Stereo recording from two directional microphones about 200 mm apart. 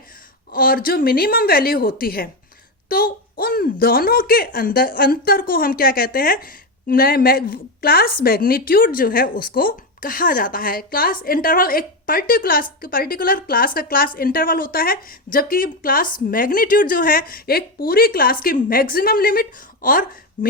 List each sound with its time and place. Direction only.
0.5 s a woman's voice: 45° left (ahead or behind)